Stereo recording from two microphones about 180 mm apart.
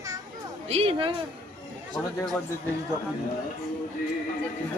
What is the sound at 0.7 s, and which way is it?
Speech, 35° right (ahead or behind).